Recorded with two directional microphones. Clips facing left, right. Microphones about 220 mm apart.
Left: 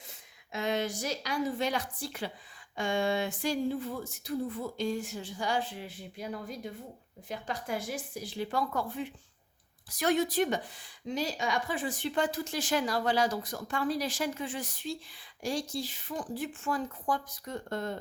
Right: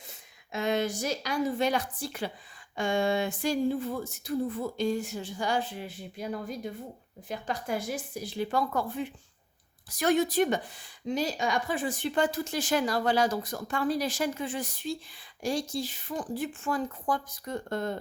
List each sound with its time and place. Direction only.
0.5 s speech: 50° right (ahead or behind)
7.3 s speech: 45° right (ahead or behind)